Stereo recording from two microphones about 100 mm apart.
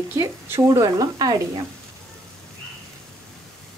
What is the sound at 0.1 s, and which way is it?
Speech, 30° right (ahead or behind).